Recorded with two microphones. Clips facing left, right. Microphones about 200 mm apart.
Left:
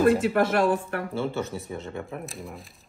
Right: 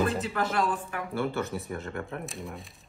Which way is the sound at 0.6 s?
60° left (ahead or behind).